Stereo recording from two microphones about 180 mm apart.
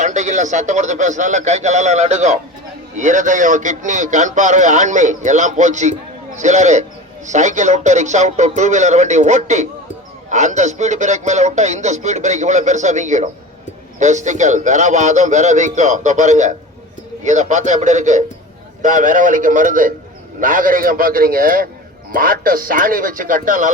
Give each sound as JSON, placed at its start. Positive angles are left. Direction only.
{"t": 0.0, "sound": "a man's voice", "side_deg": -40}